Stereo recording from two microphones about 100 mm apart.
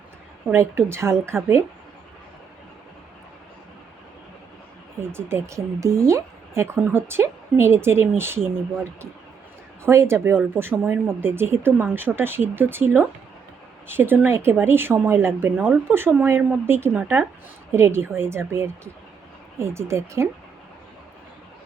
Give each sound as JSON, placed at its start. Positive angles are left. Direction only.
{"t": 0.5, "sound": "speech", "side_deg": -25}
{"t": 4.9, "sound": "speech", "side_deg": -25}